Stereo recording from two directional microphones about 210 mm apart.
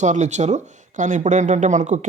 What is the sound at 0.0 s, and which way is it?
Speech, 35° right (ahead or behind).